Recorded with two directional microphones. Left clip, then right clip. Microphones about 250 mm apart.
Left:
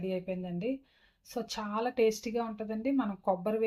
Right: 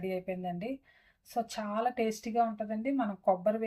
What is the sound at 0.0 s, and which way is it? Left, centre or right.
Speech, left.